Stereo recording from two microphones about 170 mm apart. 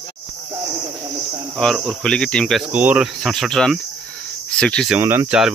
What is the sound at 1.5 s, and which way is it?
Cricket, 5° left (ahead or behind).